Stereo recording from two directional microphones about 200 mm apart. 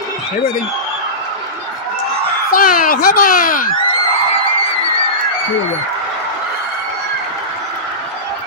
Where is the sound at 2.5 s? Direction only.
45° left (ahead or behind).